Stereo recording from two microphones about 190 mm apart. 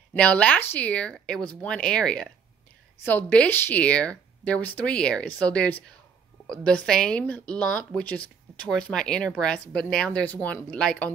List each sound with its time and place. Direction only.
0.1 s speech: 5° left (ahead or behind)